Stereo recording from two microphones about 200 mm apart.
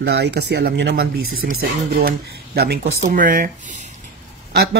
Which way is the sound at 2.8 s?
40° right (ahead or behind).